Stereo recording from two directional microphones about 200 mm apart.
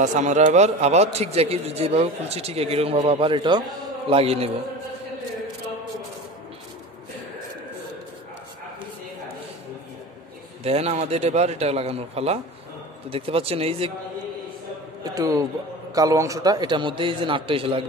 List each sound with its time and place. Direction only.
0.0 s a man's voice: 35° right (ahead or behind)
10.6 s a man's voice: 30° right (ahead or behind)
15.0 s a man's voice: 15° right (ahead or behind)